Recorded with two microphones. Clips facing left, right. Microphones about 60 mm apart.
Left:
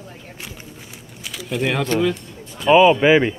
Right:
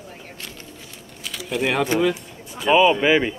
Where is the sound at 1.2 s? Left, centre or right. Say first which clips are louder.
Left 1 dB; centre.